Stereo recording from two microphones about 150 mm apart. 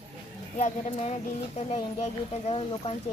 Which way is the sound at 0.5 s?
55° left (ahead or behind).